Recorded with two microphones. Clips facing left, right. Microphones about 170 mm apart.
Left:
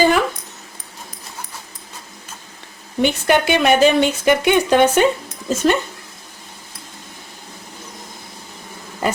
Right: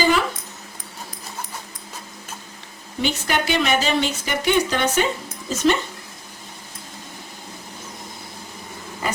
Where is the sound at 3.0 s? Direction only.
55° left (ahead or behind).